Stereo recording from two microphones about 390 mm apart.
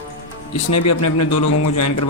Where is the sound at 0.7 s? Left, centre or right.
Left.